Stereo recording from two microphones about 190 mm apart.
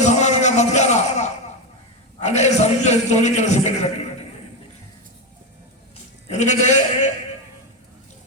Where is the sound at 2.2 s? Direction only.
35° left (ahead or behind).